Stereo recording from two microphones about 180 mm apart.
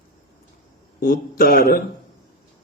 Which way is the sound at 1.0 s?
55° left (ahead or behind).